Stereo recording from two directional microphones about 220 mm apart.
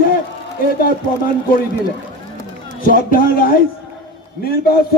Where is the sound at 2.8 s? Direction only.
40° left (ahead or behind).